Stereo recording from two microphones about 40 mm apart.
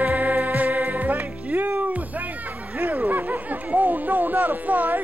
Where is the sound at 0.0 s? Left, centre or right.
Right.